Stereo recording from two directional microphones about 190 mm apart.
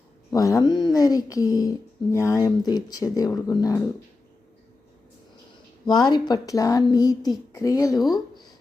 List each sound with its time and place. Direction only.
0.3 s speech: 15° left (ahead or behind)
5.8 s speech: 20° left (ahead or behind)